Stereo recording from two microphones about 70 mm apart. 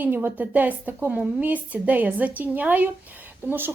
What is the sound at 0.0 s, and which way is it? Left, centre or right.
A woman's voice, right.